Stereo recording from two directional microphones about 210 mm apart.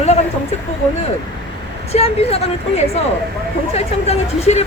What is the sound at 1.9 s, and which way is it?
A woman's voice, 30° left (ahead or behind).